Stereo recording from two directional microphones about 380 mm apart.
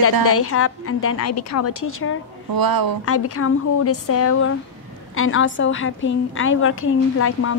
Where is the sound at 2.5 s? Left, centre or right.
Right.